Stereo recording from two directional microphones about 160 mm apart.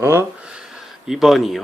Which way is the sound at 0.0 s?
15° right (ahead or behind).